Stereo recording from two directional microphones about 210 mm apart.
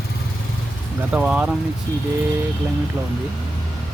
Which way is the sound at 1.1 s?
5° right (ahead or behind).